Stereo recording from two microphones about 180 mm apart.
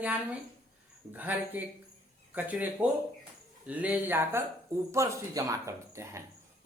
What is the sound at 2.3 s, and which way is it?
Speech, 10° right (ahead or behind).